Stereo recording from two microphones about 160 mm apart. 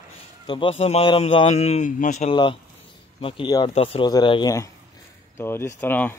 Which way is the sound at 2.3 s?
30° left (ahead or behind).